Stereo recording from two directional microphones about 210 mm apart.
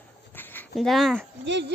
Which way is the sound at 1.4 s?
55° right (ahead or behind).